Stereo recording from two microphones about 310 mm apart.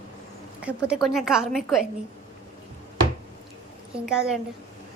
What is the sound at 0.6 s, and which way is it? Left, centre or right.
A woman's voice, centre.